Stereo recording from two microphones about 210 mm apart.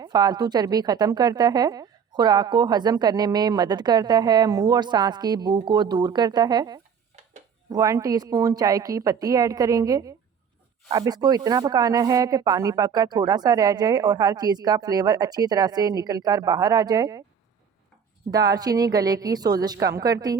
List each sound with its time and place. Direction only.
0.0 s a woman's voice: 20° right (ahead or behind)
18.3 s speech: 15° right (ahead or behind)